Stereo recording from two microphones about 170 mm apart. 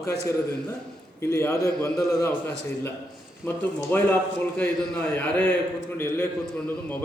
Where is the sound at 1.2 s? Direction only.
15° left (ahead or behind).